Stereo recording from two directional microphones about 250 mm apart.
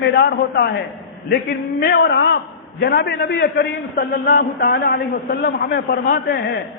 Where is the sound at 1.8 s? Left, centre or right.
Left.